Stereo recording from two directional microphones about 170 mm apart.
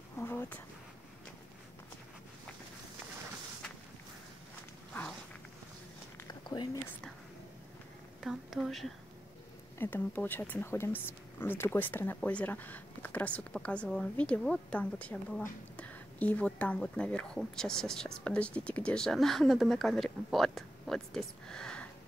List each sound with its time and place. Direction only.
0.2 s speech: 10° left (ahead or behind)
6.1 s a sound: 25° left (ahead or behind)
8.2 s a woman's voice: centre (ahead or behind)
9.8 s speech: 10° left (ahead or behind)